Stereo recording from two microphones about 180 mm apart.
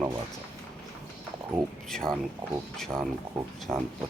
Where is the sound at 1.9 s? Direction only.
5° left (ahead or behind).